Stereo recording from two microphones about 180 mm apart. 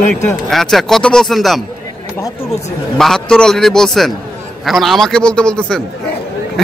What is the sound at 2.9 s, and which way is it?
Speech, centre (ahead or behind).